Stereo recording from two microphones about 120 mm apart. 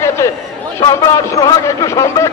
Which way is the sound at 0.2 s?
25° left (ahead or behind).